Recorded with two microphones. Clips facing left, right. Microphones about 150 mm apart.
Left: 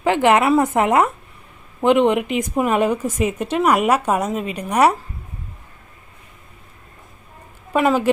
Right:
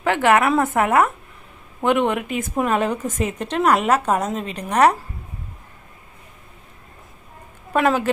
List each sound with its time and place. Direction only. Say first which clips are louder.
0.0 s a woman's voice: left 2 dB; 15° left (ahead or behind)
7.7 s a woman's voice: left 1 dB; 5° left (ahead or behind)